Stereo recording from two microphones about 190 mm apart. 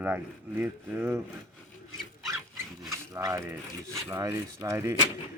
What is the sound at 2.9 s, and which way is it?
Speech, 15° right (ahead or behind).